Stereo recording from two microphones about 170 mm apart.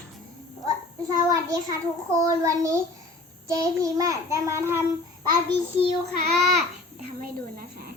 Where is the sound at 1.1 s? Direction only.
20° right (ahead or behind).